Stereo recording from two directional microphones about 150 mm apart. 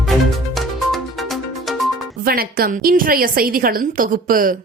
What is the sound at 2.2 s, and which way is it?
A woman's voice, 75° right (ahead or behind).